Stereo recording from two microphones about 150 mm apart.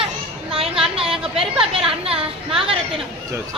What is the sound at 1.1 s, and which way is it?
Speech, 5° right (ahead or behind).